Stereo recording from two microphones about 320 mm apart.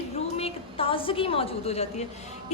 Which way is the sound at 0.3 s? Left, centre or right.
Centre.